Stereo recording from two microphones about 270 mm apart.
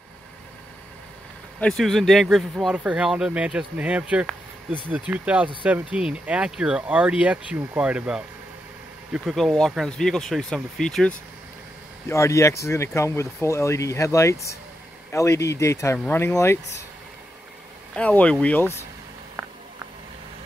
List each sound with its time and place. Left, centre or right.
1.6 s speech: centre
17.9 s speech: centre